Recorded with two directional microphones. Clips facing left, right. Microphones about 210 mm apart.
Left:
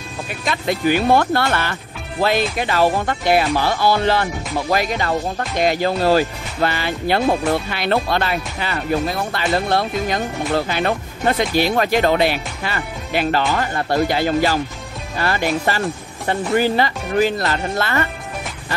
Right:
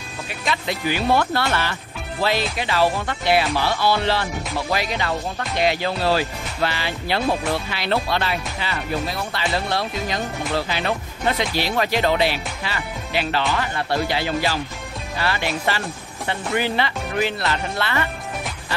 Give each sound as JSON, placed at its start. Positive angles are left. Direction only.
{"t": 0.5, "sound": "speech", "side_deg": 50}